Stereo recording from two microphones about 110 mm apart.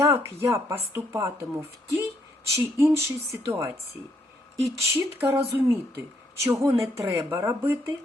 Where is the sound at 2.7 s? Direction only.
20° right (ahead or behind).